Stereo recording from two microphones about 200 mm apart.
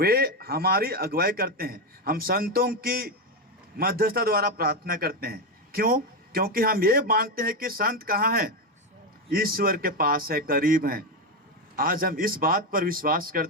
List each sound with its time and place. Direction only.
0.0 s a man's voice: 50° right (ahead or behind)